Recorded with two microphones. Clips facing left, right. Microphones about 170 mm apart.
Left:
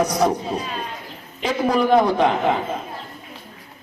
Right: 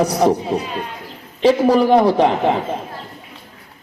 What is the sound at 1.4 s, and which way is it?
Speech, 30° right (ahead or behind).